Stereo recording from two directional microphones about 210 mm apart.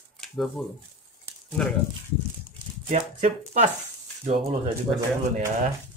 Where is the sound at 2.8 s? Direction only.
30° right (ahead or behind).